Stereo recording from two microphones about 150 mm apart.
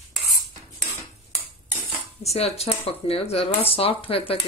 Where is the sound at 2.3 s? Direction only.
45° left (ahead or behind).